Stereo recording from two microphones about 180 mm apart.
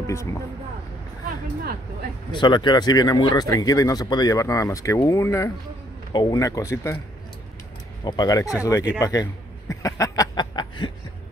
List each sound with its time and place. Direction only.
0.0 s speech: 15° left (ahead or behind)
1.2 s a sound: 55° right (ahead or behind)
2.3 s speech: 25° left (ahead or behind)
8.0 s speech: 25° left (ahead or behind)
9.0 s chuckle: 20° left (ahead or behind)